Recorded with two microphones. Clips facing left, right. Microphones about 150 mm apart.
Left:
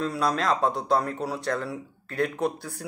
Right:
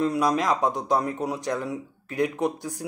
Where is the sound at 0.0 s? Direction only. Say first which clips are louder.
Right 3 dB; 15° right (ahead or behind).